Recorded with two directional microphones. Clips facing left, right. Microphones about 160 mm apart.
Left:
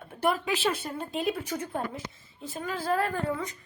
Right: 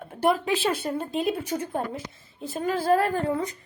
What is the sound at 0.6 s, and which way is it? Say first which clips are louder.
Speech: right 3 dB; 15° right (ahead or behind).